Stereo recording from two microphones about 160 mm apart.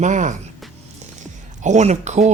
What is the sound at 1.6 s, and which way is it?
Speech, 45° right (ahead or behind).